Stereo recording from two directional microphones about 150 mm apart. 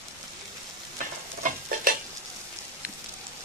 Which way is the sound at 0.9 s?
65° right (ahead or behind).